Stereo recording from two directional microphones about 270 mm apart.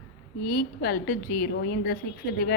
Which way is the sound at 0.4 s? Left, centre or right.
Left.